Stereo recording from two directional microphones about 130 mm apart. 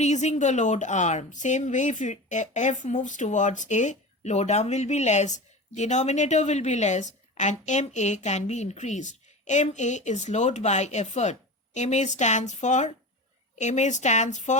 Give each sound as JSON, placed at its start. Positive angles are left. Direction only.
{"t": 0.0, "sound": "speech", "side_deg": 60}